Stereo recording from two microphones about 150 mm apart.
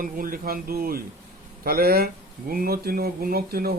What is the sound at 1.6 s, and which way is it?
Speech, 90° right.